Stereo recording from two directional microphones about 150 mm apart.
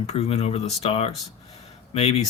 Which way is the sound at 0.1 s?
45° left (ahead or behind).